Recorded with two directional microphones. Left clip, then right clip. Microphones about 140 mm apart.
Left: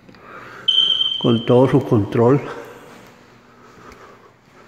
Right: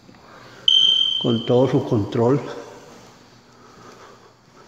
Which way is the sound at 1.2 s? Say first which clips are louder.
Left 4 dB; 25° left (ahead or behind).